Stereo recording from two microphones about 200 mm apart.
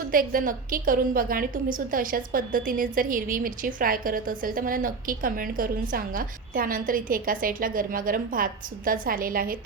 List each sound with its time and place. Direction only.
0.1 s a woman's voice: 45° right (ahead or behind)